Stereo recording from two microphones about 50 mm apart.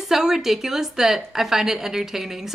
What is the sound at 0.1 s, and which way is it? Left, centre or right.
A woman's voice, centre.